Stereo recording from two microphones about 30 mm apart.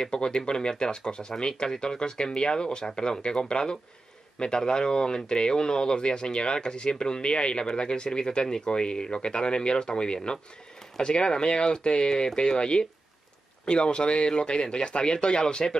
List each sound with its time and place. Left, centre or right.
0.0 s speech: left